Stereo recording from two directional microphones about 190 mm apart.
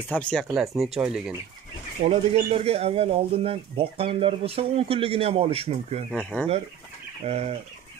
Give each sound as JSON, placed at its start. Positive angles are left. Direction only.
{"t": 0.1, "sound": "speech", "side_deg": 5}
{"t": 2.0, "sound": "speech", "side_deg": -35}
{"t": 7.2, "sound": "speech", "side_deg": -35}